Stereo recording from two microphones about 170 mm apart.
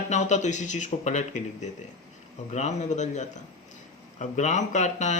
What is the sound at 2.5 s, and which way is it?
Speech, 40° left (ahead or behind).